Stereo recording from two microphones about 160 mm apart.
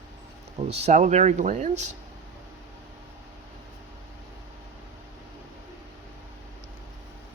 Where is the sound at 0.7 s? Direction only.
40° right (ahead or behind).